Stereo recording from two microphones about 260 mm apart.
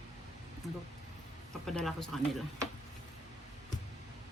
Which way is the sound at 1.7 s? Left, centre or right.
Centre.